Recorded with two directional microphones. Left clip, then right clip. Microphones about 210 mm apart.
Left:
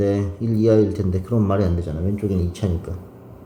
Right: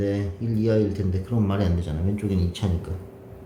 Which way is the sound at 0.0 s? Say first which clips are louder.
Left 5 dB; 25° left (ahead or behind).